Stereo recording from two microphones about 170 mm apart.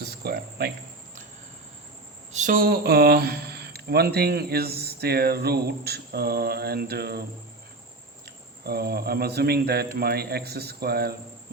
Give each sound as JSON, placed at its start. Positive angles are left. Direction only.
{"t": 0.0, "sound": "cricket", "side_deg": -65}
{"t": 2.3, "sound": "speech", "side_deg": -50}